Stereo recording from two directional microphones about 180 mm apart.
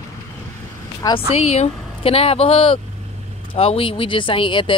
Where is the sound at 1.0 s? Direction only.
20° left (ahead or behind).